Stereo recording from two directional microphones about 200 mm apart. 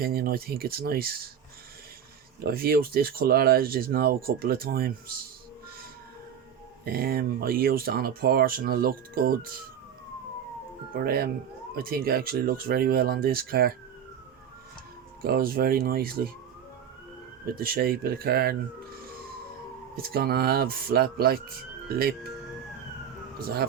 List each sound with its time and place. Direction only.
0.0 s speech: 50° right (ahead or behind)
2.4 s speech: 50° right (ahead or behind)
6.8 s speech: 45° right (ahead or behind)
10.9 s speech: 50° right (ahead or behind)
15.2 s speech: 50° right (ahead or behind)
17.4 s speech: 50° right (ahead or behind)
20.0 s speech: 50° right (ahead or behind)
23.4 s speech: 50° right (ahead or behind)